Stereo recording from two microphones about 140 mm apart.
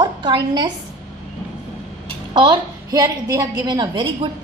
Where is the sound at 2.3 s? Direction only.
30° right (ahead or behind).